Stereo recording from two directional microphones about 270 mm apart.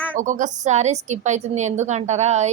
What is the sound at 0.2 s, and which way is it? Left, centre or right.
A woman's voice, right.